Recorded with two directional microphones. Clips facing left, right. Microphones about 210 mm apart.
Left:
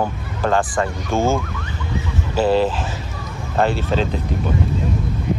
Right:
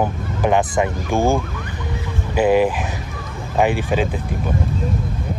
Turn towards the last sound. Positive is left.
turn(degrees=-15)  # may be behind; listen again after turning